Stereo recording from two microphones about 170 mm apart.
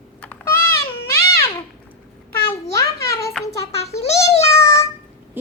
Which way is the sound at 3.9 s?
40° left (ahead or behind).